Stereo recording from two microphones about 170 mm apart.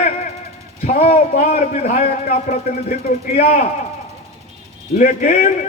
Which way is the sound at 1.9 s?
60° left (ahead or behind).